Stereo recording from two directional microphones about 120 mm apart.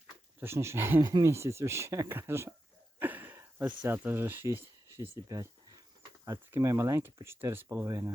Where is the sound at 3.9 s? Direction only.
15° right (ahead or behind).